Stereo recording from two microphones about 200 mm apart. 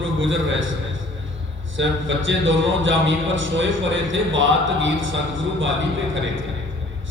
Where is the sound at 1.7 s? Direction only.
70° right (ahead or behind).